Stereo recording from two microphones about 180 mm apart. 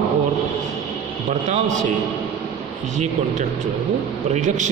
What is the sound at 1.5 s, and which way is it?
Speech, 45° right (ahead or behind).